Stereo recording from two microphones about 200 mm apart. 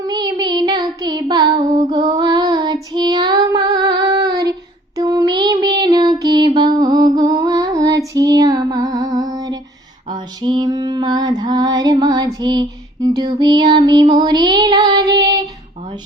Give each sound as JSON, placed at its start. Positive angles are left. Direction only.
{"t": 0.0, "sound": "child singing", "side_deg": -20}
{"t": 5.8, "sound": "music", "side_deg": -20}
{"t": 10.1, "sound": "female singing", "side_deg": -20}